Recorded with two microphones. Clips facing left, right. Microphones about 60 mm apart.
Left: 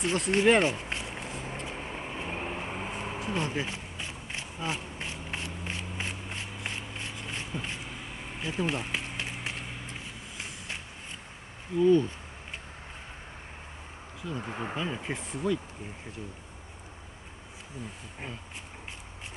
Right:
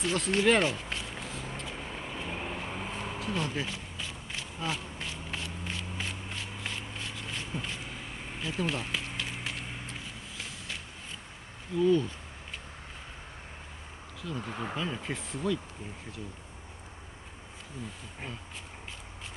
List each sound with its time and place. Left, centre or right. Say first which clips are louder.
0.0 s a sound: left 2 dB; left
11.7 s speech: left 2 dB; left
14.2 s speech: left 1 dB; left